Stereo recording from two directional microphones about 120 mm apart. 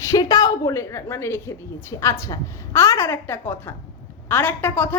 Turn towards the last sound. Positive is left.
turn(degrees=20)  # may be behind; listen again after turning